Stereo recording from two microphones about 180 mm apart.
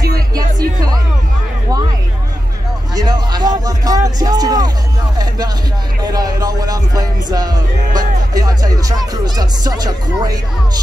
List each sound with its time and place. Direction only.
0.6 s music: 20° right (ahead or behind)
3.0 s music: 25° right (ahead or behind)
6.1 s music: 20° right (ahead or behind)